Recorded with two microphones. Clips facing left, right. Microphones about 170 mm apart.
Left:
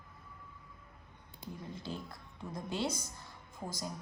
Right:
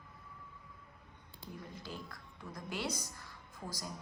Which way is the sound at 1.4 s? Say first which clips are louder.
Left 3 dB; 25° left (ahead or behind).